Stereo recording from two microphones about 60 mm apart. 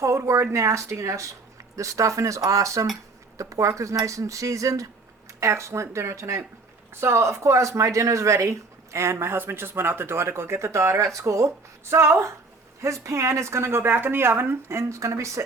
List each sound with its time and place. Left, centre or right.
0.0 s speech: right
5.4 s speech: right
11.9 s speech: right